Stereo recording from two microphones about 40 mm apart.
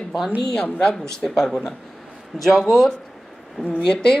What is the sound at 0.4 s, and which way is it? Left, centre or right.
A woman's voice, centre.